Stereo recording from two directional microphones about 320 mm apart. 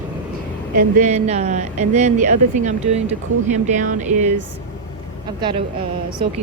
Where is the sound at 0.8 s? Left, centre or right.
Right.